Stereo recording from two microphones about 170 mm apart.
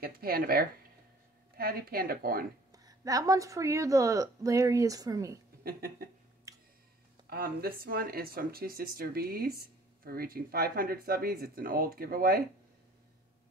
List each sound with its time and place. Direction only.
0.0 s speech: 60° right (ahead or behind)
2.7 s speech: 20° right (ahead or behind)
5.6 s speech: 60° right (ahead or behind)
6.5 s a sound: 20° right (ahead or behind)
7.2 s speech: 60° right (ahead or behind)